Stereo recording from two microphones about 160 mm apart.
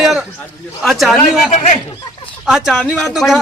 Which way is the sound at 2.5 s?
5° right (ahead or behind).